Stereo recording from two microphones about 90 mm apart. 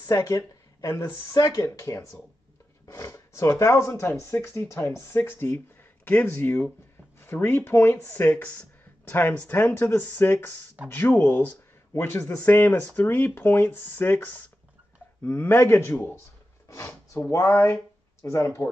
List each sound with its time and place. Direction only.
0.7 s speech: 40° left (ahead or behind); by 16.2 s 25° left (ahead or behind)
16.6 s a sound: 35° left (ahead or behind)
17.5 s speech: 25° left (ahead or behind)